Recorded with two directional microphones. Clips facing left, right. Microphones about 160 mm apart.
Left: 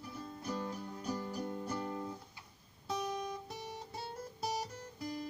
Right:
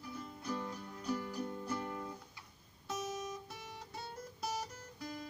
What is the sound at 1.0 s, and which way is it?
Music, 30° left (ahead or behind).